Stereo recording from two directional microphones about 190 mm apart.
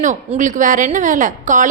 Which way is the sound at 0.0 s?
40° right (ahead or behind).